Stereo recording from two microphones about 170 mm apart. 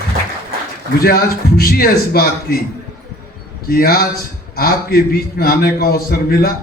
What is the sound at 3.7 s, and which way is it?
A man's voice, 60° left (ahead or behind).